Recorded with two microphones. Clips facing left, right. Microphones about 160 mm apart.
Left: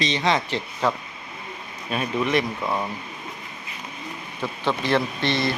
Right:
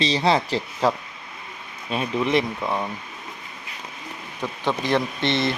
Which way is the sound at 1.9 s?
25° right (ahead or behind).